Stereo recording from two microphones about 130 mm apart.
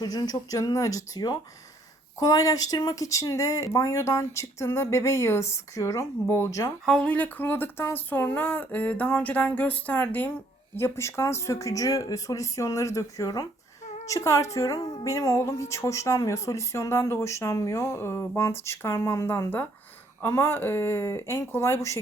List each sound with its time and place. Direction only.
0.0 s a woman's voice: 30° left (ahead or behind)
6.8 s a woman's voice: 5° left (ahead or behind)